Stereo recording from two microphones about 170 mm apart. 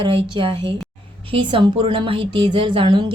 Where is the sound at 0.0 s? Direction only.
30° right (ahead or behind).